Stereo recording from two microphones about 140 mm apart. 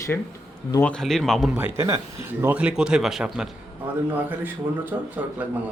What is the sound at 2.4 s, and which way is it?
Speech, 10° right (ahead or behind).